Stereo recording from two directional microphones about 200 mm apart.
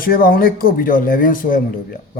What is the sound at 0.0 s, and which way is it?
Speech, 45° left (ahead or behind).